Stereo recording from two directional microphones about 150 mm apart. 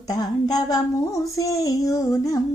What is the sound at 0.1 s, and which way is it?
Female singing, 25° left (ahead or behind).